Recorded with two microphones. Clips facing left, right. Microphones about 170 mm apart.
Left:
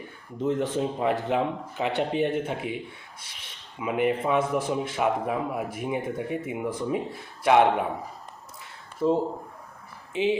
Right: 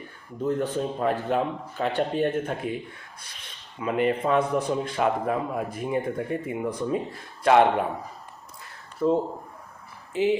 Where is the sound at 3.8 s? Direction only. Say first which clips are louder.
Right 1 dB; 10° left (ahead or behind).